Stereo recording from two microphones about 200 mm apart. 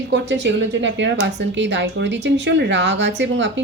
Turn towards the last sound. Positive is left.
turn(degrees=-65)  # may be behind; listen again after turning